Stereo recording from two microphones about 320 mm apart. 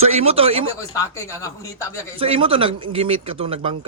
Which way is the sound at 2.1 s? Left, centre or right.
Centre.